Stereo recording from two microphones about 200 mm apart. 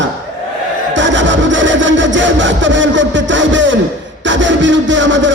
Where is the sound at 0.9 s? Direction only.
65° right (ahead or behind).